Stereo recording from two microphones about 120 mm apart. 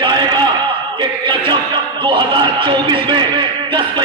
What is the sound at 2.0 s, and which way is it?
A man's voice, 45° right (ahead or behind).